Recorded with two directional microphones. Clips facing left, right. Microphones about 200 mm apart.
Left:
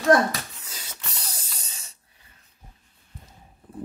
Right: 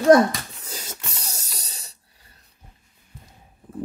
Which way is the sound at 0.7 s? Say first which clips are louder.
Right 5 dB; 45° right (ahead or behind).